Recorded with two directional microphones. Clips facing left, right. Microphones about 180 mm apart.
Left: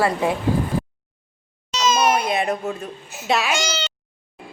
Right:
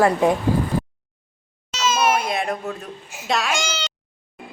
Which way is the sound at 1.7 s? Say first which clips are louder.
Left 1 dB; 5° right (ahead or behind).